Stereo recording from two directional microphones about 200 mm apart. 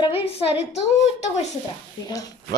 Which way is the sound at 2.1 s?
20° left (ahead or behind).